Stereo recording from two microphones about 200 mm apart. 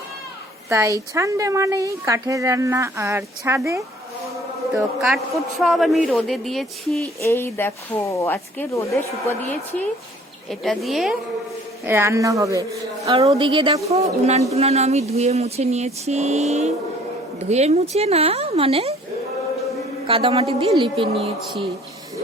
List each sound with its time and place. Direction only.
0.7 s a woman's voice: 15° right (ahead or behind)
4.7 s a man's voice: centre (ahead or behind)
7.2 s speech: 15° left (ahead or behind)
10.5 s a man's voice: centre (ahead or behind)
11.9 s a woman's voice: 10° right (ahead or behind)
13.1 s speech: 25° right (ahead or behind)
20.1 s speech: 25° right (ahead or behind)